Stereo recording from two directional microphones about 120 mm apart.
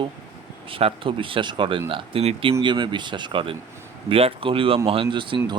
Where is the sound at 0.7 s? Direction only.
50° right (ahead or behind).